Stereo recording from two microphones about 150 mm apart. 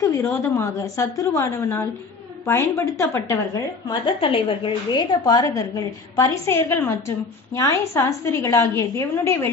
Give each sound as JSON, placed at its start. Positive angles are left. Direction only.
{"t": 0.0, "sound": "a woman's voice", "side_deg": 20}
{"t": 3.8, "sound": "a woman's voice", "side_deg": 35}
{"t": 5.2, "sound": "a woman's voice", "side_deg": 25}